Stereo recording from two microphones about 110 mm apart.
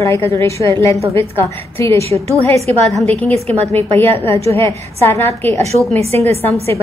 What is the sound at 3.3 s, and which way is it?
Speech, 70° right (ahead or behind).